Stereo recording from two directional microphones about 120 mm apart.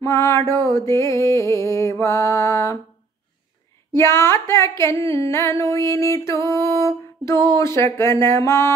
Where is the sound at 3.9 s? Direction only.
20° left (ahead or behind).